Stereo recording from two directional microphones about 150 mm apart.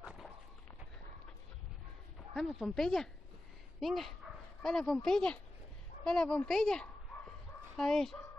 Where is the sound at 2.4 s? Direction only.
Centre (ahead or behind).